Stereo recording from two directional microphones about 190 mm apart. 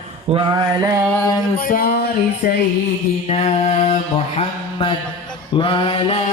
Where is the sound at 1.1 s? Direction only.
15° left (ahead or behind).